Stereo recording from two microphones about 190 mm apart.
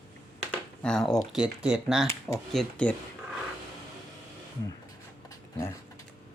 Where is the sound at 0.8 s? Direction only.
5° left (ahead or behind).